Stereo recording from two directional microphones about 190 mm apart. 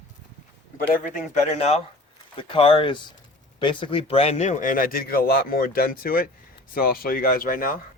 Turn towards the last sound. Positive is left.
turn(degrees=50)  # may be behind; listen again after turning